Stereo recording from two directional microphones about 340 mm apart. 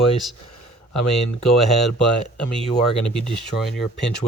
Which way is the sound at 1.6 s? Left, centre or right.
Centre.